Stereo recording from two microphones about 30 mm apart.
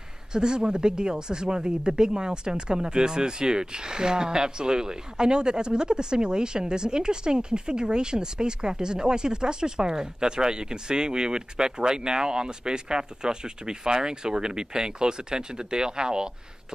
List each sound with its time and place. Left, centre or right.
0.3 s speech: right